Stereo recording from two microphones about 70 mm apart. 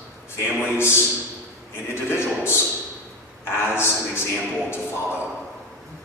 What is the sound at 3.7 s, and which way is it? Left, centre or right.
A man's voice, left.